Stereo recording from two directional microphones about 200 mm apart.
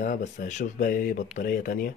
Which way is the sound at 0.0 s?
40° left (ahead or behind).